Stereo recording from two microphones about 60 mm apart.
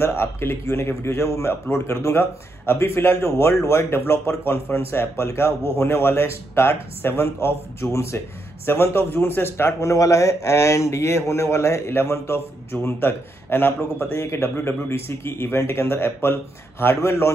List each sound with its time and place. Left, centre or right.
0.0 s a man's voice: left